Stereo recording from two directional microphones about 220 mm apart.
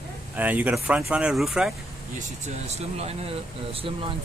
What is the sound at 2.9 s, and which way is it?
Speech, 30° right (ahead or behind).